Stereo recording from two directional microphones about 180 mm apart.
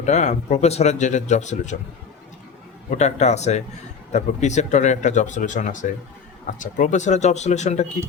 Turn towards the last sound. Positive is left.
turn(degrees=40)  # may be behind; listen again after turning